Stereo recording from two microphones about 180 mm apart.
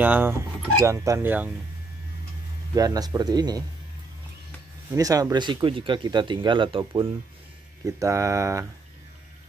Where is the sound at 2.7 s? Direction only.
20° right (ahead or behind).